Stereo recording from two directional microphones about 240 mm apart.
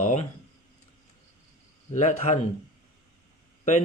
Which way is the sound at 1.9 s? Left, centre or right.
Left.